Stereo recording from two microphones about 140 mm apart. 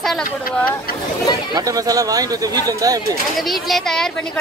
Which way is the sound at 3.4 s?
Centre (ahead or behind).